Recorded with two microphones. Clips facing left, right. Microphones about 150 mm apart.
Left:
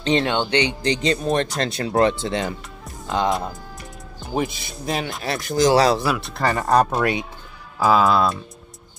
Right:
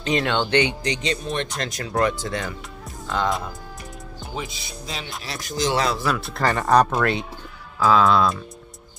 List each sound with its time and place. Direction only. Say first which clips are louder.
0.0 s speech: left 3 dB; 30° left (ahead or behind)
0.3 s speech: even; 15° left (ahead or behind)
0.8 s speech: left 5 dB; 35° left (ahead or behind)
1.6 s speech: left 2 dB; 30° left (ahead or behind)
4.4 s speech: left 9 dB; 55° left (ahead or behind)
5.7 s speech: left 7 dB; 35° left (ahead or behind)
6.0 s speech: left 1 dB; 5° left (ahead or behind)
7.0 s speech: left 1 dB; 10° left (ahead or behind)